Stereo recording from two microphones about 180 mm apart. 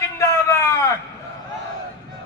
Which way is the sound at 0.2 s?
15° left (ahead or behind).